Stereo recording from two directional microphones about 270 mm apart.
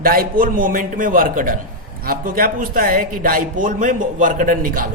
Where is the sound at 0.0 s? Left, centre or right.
Right.